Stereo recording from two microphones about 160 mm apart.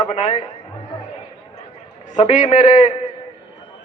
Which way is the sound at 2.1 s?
45° left (ahead or behind).